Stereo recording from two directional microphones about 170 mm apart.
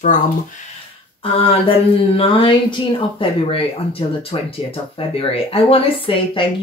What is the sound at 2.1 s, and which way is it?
Speech, 30° left (ahead or behind).